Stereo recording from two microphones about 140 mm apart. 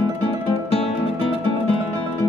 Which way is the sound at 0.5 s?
45° left (ahead or behind).